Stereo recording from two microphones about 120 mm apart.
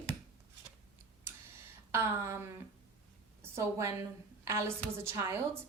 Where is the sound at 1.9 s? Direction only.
25° right (ahead or behind).